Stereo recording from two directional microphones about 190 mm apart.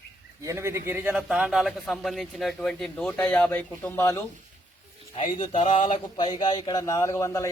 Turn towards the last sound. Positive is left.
turn(degrees=15)  # may be behind; listen again after turning